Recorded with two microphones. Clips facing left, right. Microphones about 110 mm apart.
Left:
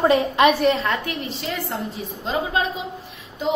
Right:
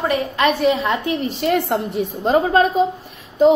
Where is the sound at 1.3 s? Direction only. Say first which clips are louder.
Right 9 dB; 55° right (ahead or behind).